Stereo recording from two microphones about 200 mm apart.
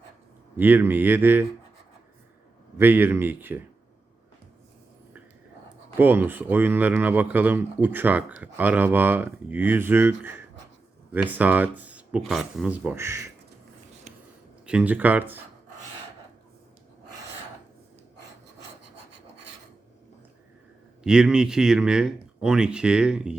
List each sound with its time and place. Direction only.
0.5 s speech: 10° right (ahead or behind)
2.7 s speech: 10° right (ahead or behind)
6.0 s speech: 10° right (ahead or behind)
14.1 s a sound: 35° right (ahead or behind)
14.7 s speech: 5° right (ahead or behind)
21.0 s a man's voice: 5° right (ahead or behind)